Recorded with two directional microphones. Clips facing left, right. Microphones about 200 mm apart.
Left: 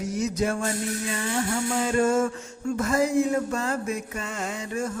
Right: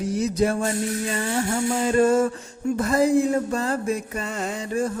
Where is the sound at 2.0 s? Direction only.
35° right (ahead or behind).